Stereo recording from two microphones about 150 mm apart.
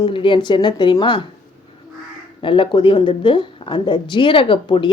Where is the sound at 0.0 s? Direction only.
35° left (ahead or behind).